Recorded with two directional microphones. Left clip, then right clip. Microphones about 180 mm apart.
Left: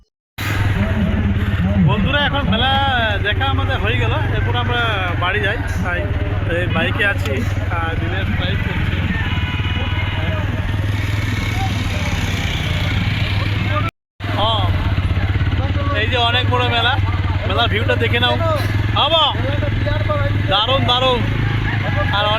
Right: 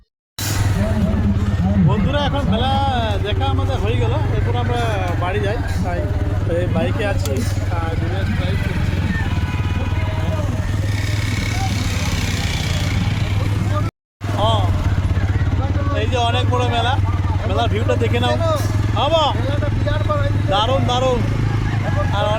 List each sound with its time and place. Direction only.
1.9 s a sound: 5° right (ahead or behind)
4.7 s speech: 15° right (ahead or behind)
14.3 s vehicle: 5° left (ahead or behind)
16.0 s vehicle: 5° left (ahead or behind)
17.5 s speech: 5° left (ahead or behind)
20.5 s speech: centre (ahead or behind)